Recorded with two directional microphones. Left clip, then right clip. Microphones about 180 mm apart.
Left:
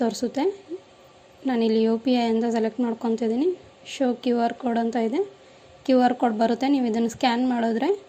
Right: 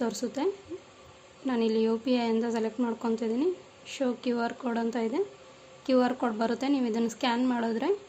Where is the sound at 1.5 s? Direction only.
20° left (ahead or behind).